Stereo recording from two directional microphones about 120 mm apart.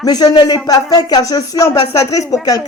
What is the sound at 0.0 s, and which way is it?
A man's voice, 35° left (ahead or behind).